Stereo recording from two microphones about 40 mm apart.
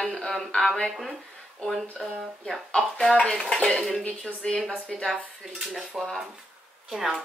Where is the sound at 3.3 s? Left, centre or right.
Centre.